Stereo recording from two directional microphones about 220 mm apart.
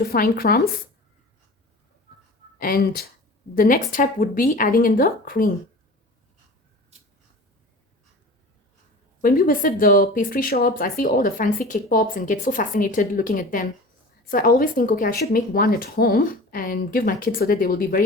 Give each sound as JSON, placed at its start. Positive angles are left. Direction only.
{"t": 0.0, "sound": "speech", "side_deg": 45}
{"t": 2.6, "sound": "speech", "side_deg": 45}
{"t": 6.9, "sound": "scissors", "side_deg": -30}
{"t": 9.2, "sound": "speech", "side_deg": 40}